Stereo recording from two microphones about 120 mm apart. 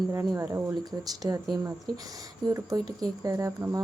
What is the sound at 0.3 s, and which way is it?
Speech, 25° right (ahead or behind).